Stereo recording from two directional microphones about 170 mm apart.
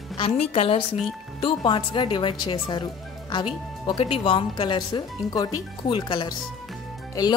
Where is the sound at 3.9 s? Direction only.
30° left (ahead or behind).